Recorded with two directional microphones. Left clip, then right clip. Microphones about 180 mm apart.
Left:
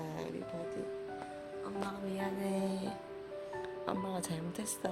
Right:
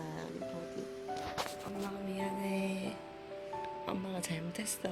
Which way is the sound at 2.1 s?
10° left (ahead or behind).